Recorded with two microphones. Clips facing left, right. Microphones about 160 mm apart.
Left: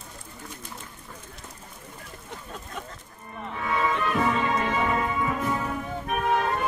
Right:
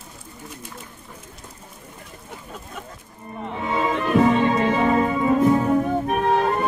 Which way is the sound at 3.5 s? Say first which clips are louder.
Right 3 dB; 25° right (ahead or behind).